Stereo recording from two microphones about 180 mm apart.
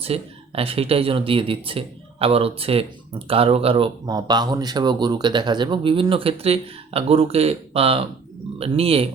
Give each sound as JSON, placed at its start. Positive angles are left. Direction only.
{"t": 0.0, "sound": "speech", "side_deg": -30}
{"t": 4.0, "sound": "speech", "side_deg": -20}